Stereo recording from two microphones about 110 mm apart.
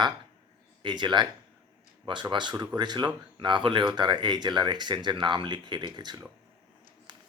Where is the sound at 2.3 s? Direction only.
45° right (ahead or behind).